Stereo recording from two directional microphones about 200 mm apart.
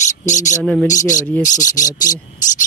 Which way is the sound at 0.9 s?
40° left (ahead or behind).